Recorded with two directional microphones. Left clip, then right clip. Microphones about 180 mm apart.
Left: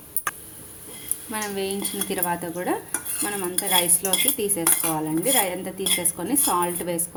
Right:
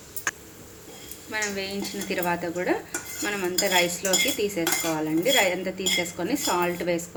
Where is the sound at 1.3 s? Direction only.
55° left (ahead or behind).